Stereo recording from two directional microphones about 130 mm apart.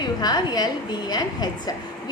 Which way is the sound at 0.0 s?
30° left (ahead or behind).